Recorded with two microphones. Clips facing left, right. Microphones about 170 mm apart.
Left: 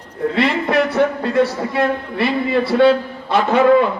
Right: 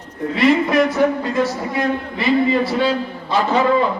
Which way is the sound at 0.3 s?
60° left (ahead or behind).